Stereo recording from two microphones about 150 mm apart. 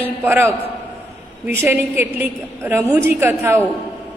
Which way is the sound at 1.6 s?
15° right (ahead or behind).